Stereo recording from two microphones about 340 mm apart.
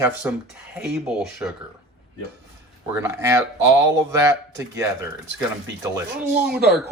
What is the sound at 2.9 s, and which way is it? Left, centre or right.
Speech, centre.